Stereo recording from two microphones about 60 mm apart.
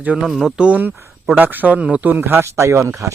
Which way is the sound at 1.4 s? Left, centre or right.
Right.